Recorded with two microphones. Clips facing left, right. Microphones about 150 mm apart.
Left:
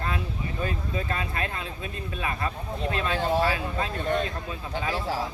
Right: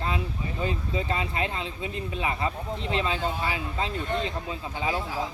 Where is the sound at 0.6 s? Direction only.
20° right (ahead or behind).